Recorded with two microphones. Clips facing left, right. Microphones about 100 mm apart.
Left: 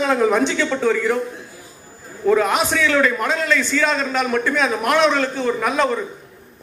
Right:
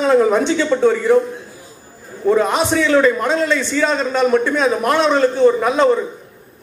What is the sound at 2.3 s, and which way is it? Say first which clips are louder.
A man's voice: right 2 dB; 25° right (ahead or behind).